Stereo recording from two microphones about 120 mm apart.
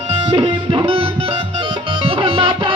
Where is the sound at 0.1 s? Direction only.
50° right (ahead or behind).